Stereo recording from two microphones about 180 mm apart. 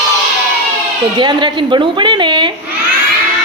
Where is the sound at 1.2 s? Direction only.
25° right (ahead or behind).